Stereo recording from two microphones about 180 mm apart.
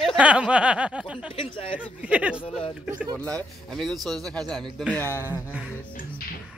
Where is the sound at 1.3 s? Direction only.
30° left (ahead or behind).